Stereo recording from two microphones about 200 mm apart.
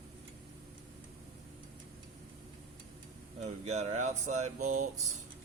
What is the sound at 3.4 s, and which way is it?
Speech, 35° right (ahead or behind).